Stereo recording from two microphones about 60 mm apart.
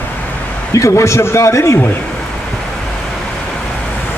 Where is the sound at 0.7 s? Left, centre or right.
Left.